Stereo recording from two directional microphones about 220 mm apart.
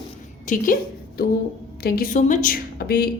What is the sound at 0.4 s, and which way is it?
A woman's voice, 35° left (ahead or behind).